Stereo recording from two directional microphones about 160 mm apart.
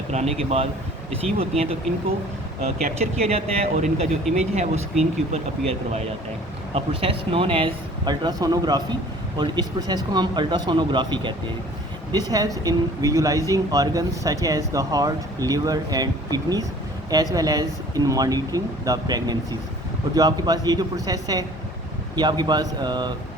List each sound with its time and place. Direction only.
0.1 s speech: 40° right (ahead or behind)
2.8 s speech: 40° right (ahead or behind)